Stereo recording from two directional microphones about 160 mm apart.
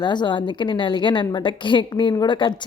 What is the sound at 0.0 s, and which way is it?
A woman's voice, 30° left (ahead or behind).